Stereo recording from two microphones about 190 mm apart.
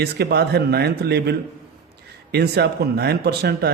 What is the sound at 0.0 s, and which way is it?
Speech, 60° right (ahead or behind).